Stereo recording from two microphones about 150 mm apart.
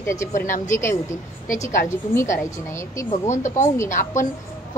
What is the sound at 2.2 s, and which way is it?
Speech, 20° left (ahead or behind).